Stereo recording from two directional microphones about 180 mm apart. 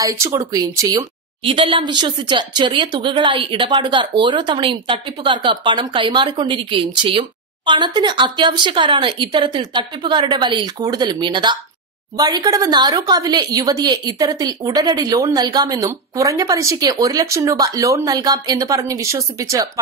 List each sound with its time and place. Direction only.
0.0 s a woman's voice: 20° right (ahead or behind)